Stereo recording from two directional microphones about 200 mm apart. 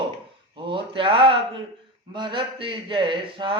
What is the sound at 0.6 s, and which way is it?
Mantra, 25° right (ahead or behind).